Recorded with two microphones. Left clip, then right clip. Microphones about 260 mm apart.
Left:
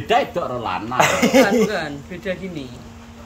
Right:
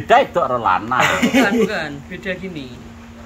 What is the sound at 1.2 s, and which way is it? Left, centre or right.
Speech, left.